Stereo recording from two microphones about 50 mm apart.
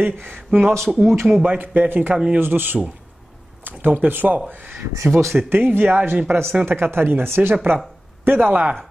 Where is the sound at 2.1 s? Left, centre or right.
Centre.